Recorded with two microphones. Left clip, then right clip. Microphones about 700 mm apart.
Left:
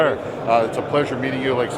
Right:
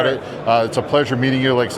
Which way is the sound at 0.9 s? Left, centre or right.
Right.